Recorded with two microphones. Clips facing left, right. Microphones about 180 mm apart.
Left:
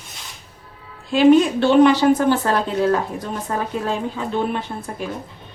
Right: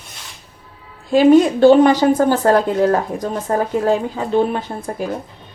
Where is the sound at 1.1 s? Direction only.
40° right (ahead or behind).